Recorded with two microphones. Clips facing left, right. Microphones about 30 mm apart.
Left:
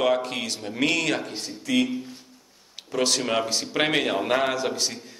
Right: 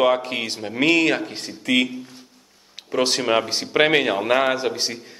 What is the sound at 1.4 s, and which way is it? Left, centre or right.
Speech, right.